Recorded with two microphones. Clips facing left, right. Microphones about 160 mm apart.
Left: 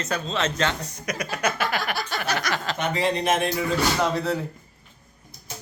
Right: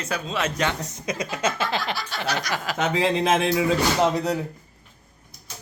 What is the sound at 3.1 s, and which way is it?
Speech, 90° right.